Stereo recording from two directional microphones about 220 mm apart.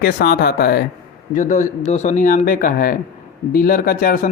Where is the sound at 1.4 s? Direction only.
35° left (ahead or behind).